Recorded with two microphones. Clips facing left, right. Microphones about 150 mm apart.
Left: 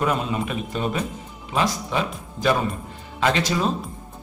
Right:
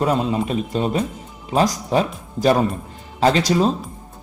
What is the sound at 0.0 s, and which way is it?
A man's voice, 30° right (ahead or behind).